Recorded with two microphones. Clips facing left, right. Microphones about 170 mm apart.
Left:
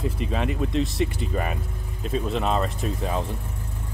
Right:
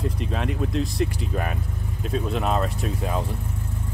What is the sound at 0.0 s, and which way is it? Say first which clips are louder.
Speech: left 1 dB; centre (ahead or behind).